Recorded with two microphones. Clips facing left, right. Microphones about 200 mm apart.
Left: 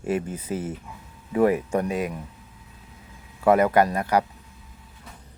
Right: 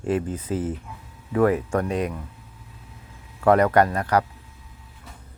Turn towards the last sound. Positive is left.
turn(degrees=10)  # may be behind; listen again after turning